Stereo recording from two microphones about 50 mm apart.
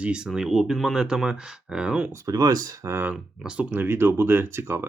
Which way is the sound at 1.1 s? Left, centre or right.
Centre.